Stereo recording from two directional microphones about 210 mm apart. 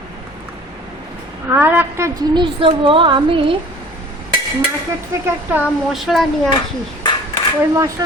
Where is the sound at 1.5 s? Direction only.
10° right (ahead or behind).